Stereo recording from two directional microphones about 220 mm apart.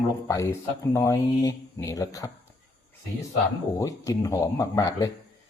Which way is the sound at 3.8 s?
15° left (ahead or behind).